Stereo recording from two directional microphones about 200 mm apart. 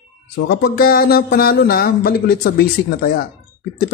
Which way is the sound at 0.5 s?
50° left (ahead or behind).